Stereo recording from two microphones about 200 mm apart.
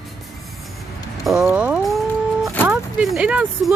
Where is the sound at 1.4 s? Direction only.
5° right (ahead or behind).